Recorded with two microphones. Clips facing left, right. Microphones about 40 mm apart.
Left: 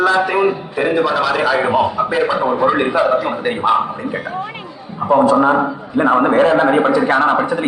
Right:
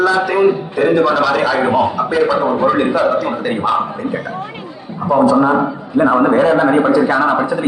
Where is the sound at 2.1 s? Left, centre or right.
Left.